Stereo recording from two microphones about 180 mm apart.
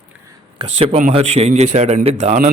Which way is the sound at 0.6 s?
35° right (ahead or behind).